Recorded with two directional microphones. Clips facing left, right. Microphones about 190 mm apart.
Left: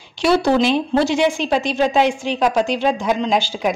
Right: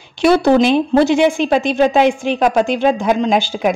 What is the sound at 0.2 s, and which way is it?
Speech, 55° right (ahead or behind).